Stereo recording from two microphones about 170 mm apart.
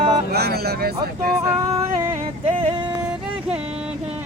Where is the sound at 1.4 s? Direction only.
20° right (ahead or behind).